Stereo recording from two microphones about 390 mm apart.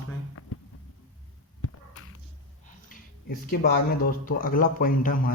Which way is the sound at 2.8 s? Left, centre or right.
Left.